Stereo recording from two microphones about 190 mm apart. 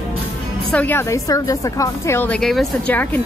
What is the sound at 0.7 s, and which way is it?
A woman's voice, 10° left (ahead or behind).